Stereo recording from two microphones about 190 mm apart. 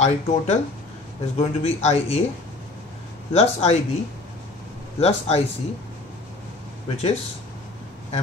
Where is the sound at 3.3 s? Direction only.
35° left (ahead or behind).